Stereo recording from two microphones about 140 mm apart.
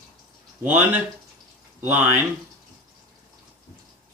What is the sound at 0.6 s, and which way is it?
A man's voice, 15° right (ahead or behind).